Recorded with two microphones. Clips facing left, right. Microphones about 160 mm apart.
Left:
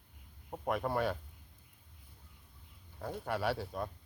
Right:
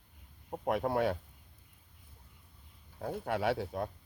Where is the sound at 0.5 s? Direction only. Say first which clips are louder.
Right 3 dB; 15° right (ahead or behind).